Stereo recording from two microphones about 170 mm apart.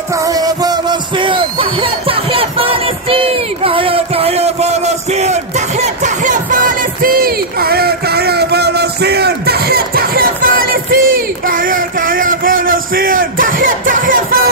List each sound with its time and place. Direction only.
0.1 s music: 20° right (ahead or behind); by 14.4 s 55° right (ahead or behind)